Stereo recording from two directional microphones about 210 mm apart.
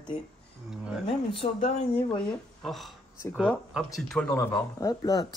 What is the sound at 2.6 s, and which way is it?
Speech, centre (ahead or behind).